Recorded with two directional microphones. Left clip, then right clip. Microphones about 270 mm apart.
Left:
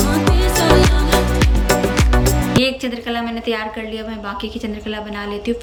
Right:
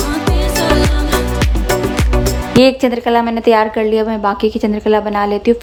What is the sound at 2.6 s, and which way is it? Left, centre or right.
A woman's voice, centre.